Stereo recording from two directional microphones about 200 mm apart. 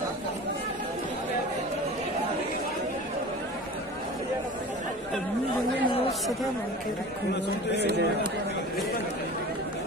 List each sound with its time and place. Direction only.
7.8 s speech: 55° right (ahead or behind)